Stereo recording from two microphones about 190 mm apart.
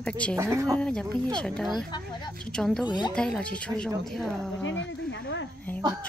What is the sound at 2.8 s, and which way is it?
Speech, 25° left (ahead or behind).